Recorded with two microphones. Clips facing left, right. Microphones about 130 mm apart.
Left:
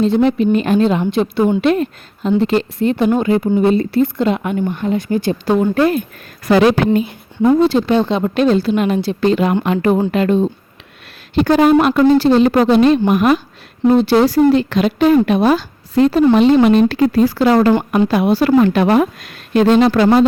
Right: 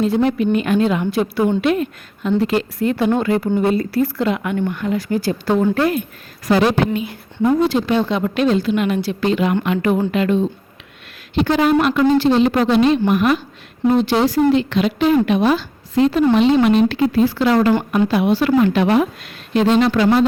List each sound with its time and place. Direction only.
0.0 s speech: 25° left (ahead or behind)
1.6 s a woman's voice: 35° left (ahead or behind); by 5.8 s 20° left (ahead or behind)
6.4 s speech: 75° left (ahead or behind)
7.0 s a woman's voice: 25° left (ahead or behind); by 20.2 s 40° left (ahead or behind)